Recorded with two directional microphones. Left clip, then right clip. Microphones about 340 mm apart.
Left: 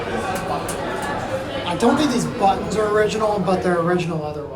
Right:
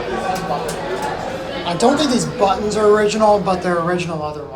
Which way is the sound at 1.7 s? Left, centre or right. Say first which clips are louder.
Right 3 dB; centre.